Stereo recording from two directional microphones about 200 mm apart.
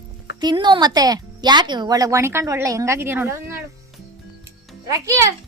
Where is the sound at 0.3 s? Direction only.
20° right (ahead or behind).